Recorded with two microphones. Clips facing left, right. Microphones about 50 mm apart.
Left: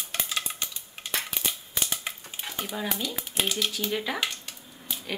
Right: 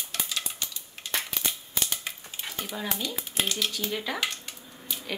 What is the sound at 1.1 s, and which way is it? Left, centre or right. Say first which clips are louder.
Typewriter: even; centre.